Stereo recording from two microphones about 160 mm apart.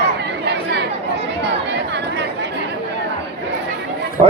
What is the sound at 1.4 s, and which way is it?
Chatter, 90° right.